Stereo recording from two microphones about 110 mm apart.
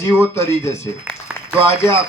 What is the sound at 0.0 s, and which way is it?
Speech, 25° left (ahead or behind).